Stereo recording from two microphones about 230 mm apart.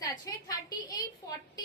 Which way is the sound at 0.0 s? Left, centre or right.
Centre.